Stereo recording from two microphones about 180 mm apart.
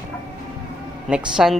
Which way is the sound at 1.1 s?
5° right (ahead or behind).